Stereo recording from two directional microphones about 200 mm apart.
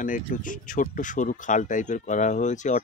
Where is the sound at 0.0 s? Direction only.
40° left (ahead or behind).